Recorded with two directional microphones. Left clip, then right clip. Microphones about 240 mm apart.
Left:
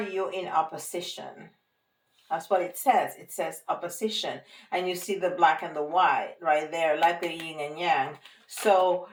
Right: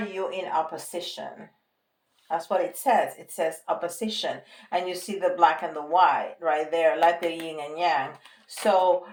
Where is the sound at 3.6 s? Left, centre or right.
Right.